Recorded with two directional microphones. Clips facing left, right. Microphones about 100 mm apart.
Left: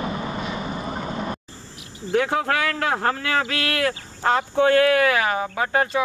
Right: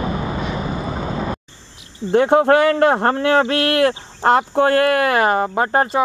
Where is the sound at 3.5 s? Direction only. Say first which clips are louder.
Right 8 dB; 55° right (ahead or behind).